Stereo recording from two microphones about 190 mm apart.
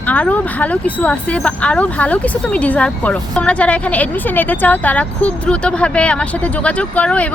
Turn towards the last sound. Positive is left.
turn(degrees=5)  # may be behind; listen again after turning